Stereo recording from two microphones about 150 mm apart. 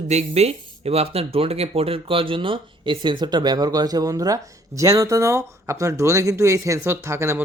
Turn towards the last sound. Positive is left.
turn(degrees=-15)  # may be behind; listen again after turning